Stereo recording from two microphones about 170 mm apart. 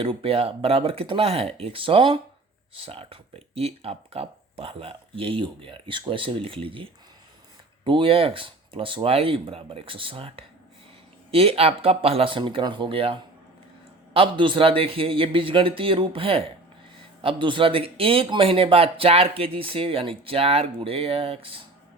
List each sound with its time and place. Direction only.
0.0 s speech: 30° right (ahead or behind)
7.9 s speech: 30° right (ahead or behind)